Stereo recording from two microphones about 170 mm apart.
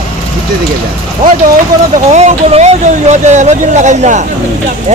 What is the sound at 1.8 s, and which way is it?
Speech, 40° right (ahead or behind).